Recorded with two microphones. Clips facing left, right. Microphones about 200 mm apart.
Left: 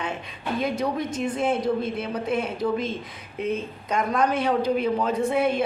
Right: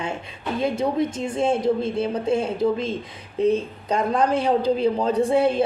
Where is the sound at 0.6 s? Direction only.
25° right (ahead or behind).